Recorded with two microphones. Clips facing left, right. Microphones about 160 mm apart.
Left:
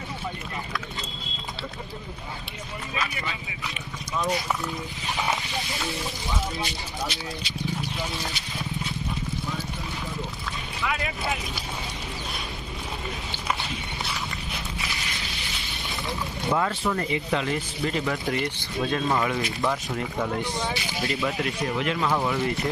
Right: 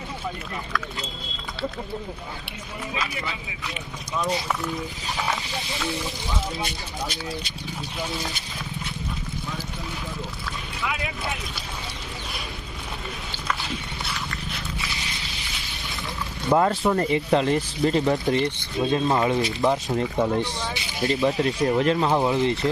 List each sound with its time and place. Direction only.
10.8 s speech: centre (ahead or behind)
16.5 s speech: 40° right (ahead or behind); by 22.7 s 25° right (ahead or behind)